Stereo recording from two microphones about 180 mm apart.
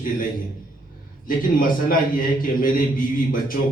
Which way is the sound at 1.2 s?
50° left (ahead or behind).